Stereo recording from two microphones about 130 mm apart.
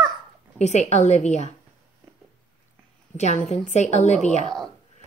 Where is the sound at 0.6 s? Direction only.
60° left (ahead or behind).